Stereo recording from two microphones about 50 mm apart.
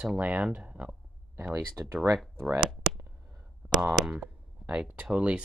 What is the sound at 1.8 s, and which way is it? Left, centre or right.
Speech, right.